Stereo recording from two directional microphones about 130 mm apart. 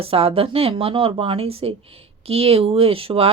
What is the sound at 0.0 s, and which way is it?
Speech, 45° right (ahead or behind).